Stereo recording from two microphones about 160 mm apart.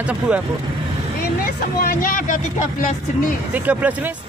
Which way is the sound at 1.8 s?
60° left (ahead or behind).